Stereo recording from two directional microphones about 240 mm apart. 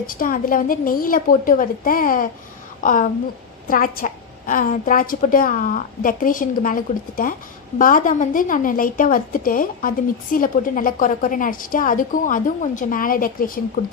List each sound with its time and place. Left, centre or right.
0.1 s a woman's voice: left